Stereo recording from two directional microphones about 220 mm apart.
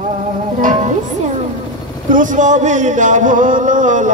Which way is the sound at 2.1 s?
35° right (ahead or behind).